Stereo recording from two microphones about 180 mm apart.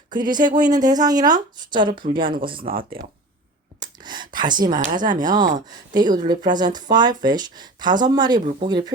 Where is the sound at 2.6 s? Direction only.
50° right (ahead or behind).